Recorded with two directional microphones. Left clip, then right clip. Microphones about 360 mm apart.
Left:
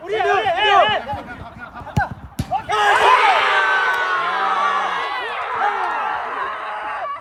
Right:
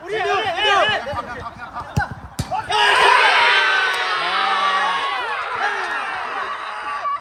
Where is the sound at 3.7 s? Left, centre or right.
Centre.